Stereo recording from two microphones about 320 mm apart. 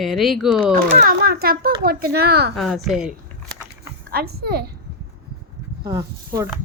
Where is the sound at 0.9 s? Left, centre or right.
Right.